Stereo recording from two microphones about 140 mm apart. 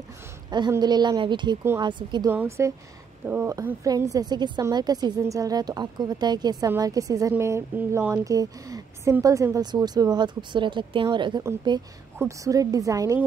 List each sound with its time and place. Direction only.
0.5 s speech: 30° right (ahead or behind)
2.3 s a woman's voice: 20° right (ahead or behind)